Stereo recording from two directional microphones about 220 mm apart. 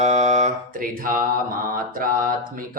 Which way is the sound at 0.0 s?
30° right (ahead or behind).